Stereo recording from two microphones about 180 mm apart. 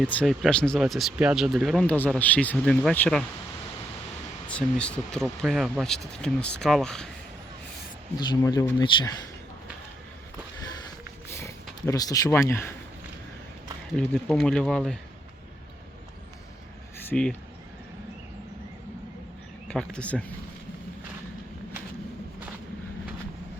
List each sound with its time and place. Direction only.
0.2 s speech: 5° left (ahead or behind)
4.4 s speech: 5° left (ahead or behind)
8.1 s speech: 20° left (ahead or behind)
11.3 s speech: 15° left (ahead or behind)
13.9 s speech: 5° left (ahead or behind)
17.1 s speech: 5° left (ahead or behind)
19.6 s speech: 5° left (ahead or behind)